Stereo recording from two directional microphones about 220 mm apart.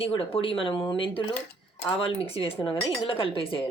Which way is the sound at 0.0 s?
25° left (ahead or behind).